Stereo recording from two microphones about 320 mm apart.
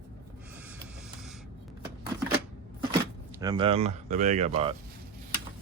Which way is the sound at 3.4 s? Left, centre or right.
Centre.